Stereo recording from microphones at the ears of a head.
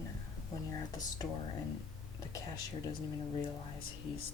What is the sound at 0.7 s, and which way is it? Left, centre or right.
Speech, left.